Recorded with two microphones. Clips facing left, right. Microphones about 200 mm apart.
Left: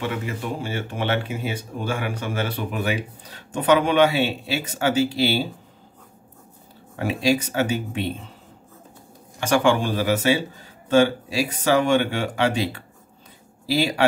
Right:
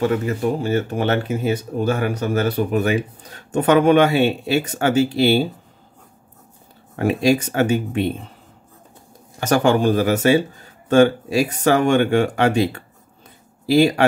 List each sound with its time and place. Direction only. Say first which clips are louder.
0.0 s speech: right 8 dB; 40° right (ahead or behind)
7.0 s speech: right 4 dB; 50° right (ahead or behind)
9.4 s speech: right 3 dB; 40° right (ahead or behind)